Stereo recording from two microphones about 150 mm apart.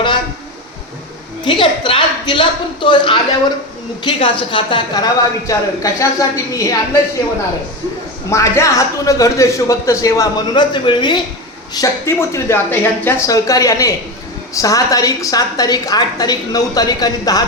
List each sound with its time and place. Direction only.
1.5 s a woman's voice: 35° left (ahead or behind)
8.3 s a woman's voice: 20° left (ahead or behind)